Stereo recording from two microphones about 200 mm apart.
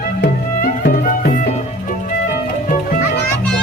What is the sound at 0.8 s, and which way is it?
Music, 40° left (ahead or behind).